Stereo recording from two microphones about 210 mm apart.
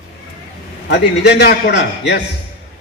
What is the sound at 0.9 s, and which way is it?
A man's voice, 50° left (ahead or behind).